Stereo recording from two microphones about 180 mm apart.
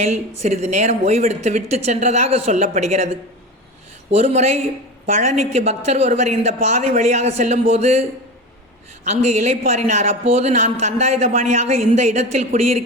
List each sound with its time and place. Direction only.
0.0 s speech: 40° right (ahead or behind)
9.2 s speech: 40° right (ahead or behind)